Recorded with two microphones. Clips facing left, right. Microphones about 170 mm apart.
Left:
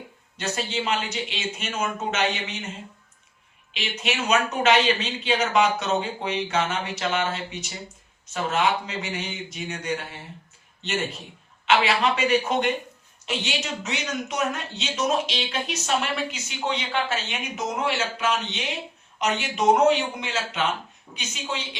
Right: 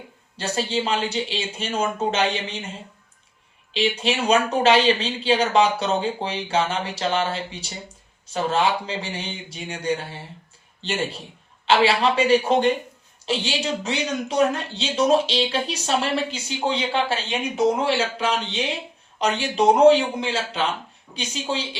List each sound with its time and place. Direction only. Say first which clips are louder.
0.3 s speech: right 4 dB; 30° right (ahead or behind)
3.7 s a man's voice: right 7 dB; 30° right (ahead or behind)